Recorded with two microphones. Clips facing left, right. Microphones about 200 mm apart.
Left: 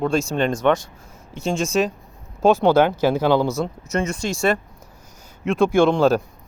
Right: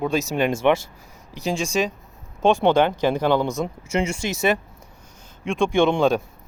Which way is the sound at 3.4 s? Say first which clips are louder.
Left 2 dB; 15° right (ahead or behind).